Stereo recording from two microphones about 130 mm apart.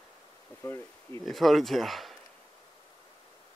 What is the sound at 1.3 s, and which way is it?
Speech, centre (ahead or behind).